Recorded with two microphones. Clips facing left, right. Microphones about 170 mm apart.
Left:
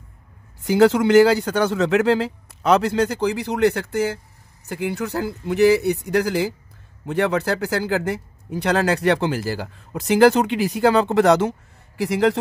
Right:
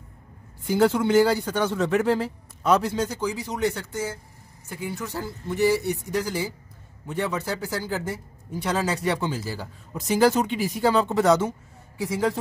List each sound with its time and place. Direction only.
0.7 s speech: 85° left; by 4.2 s 65° left (ahead or behind)
4.6 s speech: 75° left (ahead or behind)